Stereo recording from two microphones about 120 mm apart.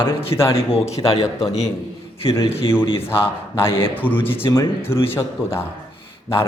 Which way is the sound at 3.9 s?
15° left (ahead or behind).